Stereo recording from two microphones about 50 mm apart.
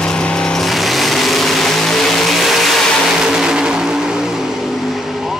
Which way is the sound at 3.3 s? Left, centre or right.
Centre.